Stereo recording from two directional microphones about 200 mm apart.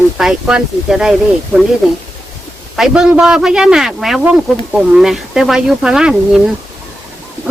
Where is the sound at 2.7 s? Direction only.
Centre (ahead or behind).